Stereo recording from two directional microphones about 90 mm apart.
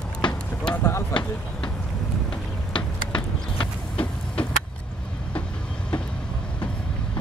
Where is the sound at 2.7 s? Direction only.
60° left (ahead or behind).